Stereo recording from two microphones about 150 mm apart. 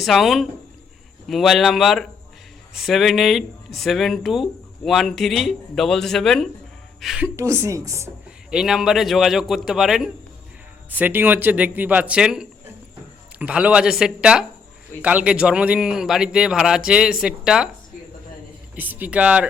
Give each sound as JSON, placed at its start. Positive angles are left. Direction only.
{"t": 0.0, "sound": "a woman's voice", "side_deg": 0}
{"t": 7.3, "sound": "speech", "side_deg": -20}
{"t": 8.4, "sound": "a man's voice", "side_deg": -5}
{"t": 18.8, "sound": "a man's voice", "side_deg": -10}